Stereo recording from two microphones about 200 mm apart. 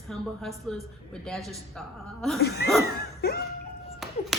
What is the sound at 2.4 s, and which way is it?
Speech, 50° left (ahead or behind).